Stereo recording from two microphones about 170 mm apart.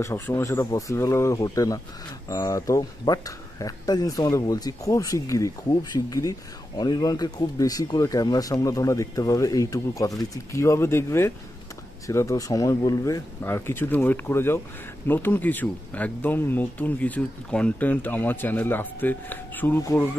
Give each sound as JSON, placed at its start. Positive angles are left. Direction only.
{"t": 0.0, "sound": "speech", "side_deg": 15}